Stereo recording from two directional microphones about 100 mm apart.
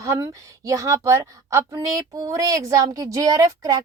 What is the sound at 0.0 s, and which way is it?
A woman's voice, 35° right (ahead or behind).